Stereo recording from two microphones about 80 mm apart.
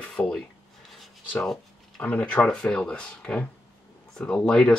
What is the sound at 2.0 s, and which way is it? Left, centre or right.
Speech, centre.